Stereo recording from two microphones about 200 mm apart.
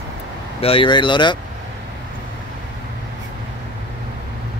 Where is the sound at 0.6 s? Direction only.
25° left (ahead or behind).